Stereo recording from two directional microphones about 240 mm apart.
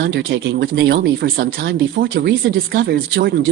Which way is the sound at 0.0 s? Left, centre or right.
Right.